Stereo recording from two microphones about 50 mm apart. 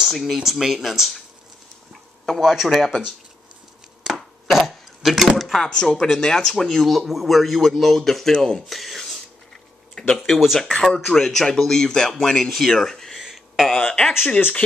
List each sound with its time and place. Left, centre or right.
0.1 s speech: centre
1.9 s a sound: centre
2.5 s speech: centre
4.0 s chopping: centre
5.4 s speech: centre
5.7 s speech: centre
5.9 s a man's voice: centre
10.1 s speech: centre
10.8 s speech: centre
13.2 s a sound: centre
13.7 s speech: centre